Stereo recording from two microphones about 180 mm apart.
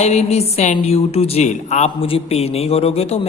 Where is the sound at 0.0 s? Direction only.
35° left (ahead or behind).